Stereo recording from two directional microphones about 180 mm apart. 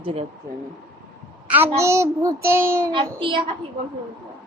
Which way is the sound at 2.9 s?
30° right (ahead or behind).